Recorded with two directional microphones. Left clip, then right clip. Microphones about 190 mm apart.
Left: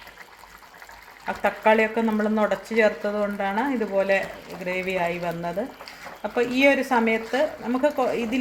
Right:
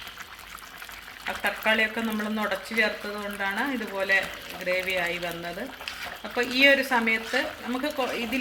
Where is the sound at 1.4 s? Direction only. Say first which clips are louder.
Left 5 dB; 50° left (ahead or behind).